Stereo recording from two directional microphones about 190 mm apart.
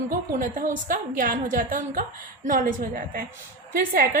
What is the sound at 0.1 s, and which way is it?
A woman's voice, 45° right (ahead or behind).